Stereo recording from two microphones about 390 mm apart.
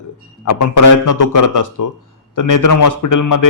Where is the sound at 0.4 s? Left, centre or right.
Left.